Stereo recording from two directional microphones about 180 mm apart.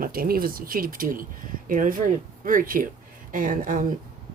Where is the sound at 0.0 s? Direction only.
55° right (ahead or behind).